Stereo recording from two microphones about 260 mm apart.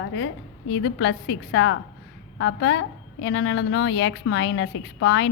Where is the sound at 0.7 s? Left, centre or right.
Left.